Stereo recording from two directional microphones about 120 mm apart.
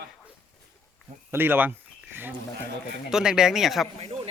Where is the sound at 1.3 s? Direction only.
15° right (ahead or behind).